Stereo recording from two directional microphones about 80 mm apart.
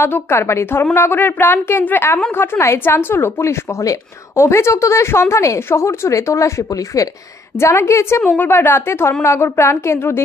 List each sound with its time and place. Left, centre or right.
0.0 s a woman's voice: left